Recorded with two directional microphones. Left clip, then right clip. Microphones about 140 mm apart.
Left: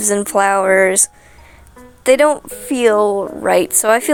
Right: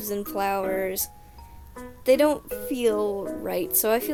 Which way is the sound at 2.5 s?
40° left (ahead or behind).